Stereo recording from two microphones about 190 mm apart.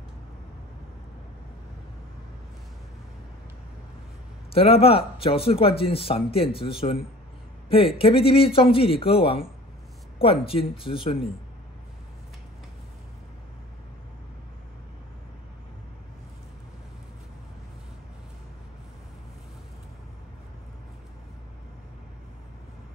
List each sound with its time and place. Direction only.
4.5 s speech: 30° left (ahead or behind)